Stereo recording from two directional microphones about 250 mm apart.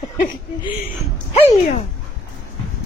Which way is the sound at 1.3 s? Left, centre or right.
Left.